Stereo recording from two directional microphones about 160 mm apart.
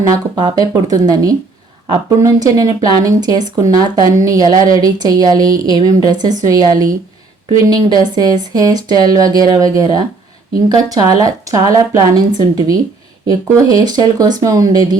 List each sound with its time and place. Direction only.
0.1 s speech: 25° right (ahead or behind)